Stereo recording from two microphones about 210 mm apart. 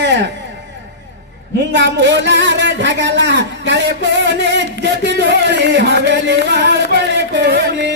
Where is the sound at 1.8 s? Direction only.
55° right (ahead or behind).